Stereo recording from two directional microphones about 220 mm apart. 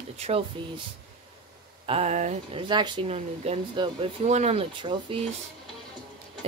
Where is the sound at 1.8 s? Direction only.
30° right (ahead or behind).